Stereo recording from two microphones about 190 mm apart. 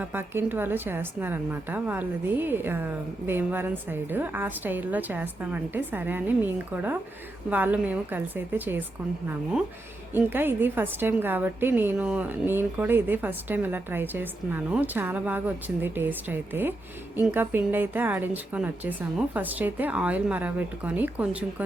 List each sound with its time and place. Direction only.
0.0 s a woman's voice: 10° right (ahead or behind)
10.1 s a woman's voice: 10° right (ahead or behind)